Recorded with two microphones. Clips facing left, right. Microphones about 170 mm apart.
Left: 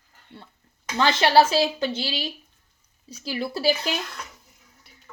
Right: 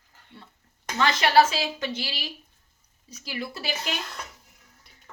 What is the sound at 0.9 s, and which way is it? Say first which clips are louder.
Speech: left 2 dB; 30° left (ahead or behind).